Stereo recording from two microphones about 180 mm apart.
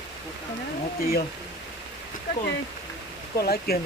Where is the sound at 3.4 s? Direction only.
60° left (ahead or behind).